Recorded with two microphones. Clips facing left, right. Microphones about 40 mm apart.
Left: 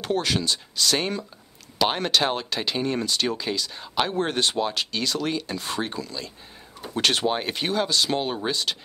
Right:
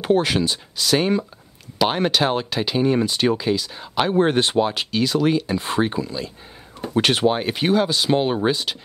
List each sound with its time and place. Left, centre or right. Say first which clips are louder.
0.0 s speech: right 6 dB; centre
5.6 s speech: right 7 dB; centre